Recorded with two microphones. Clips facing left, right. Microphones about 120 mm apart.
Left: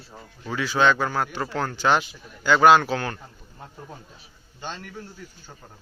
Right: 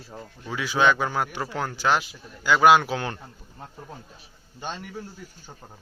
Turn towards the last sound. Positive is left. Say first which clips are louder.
# right 1 dB
turn(degrees=-10)  # may be behind; listen again after turning